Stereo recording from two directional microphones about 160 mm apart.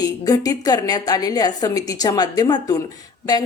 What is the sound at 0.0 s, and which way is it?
A woman's voice, 20° left (ahead or behind).